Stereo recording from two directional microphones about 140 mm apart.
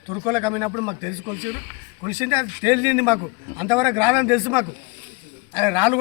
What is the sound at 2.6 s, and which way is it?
A man's voice, 15° right (ahead or behind).